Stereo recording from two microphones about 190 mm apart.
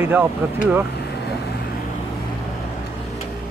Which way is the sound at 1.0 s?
60° left (ahead or behind).